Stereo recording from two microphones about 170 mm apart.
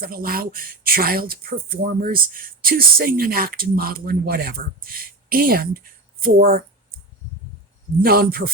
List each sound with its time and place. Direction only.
0.0 s speech: 60° right (ahead or behind)
8.0 s speech: 60° right (ahead or behind)